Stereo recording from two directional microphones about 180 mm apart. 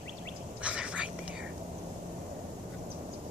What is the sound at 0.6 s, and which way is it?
Whispering, 5° right (ahead or behind).